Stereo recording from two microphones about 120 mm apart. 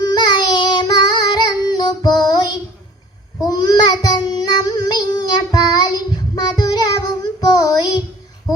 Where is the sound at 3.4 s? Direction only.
35° left (ahead or behind).